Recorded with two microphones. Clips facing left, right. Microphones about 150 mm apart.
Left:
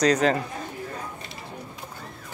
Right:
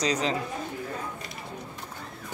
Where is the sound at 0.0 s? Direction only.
50° left (ahead or behind).